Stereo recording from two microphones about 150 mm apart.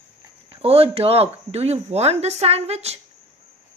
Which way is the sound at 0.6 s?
40° right (ahead or behind).